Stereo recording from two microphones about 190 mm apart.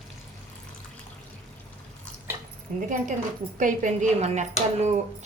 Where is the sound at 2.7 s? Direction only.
45° right (ahead or behind).